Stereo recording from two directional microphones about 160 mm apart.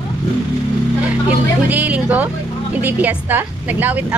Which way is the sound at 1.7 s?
10° right (ahead or behind).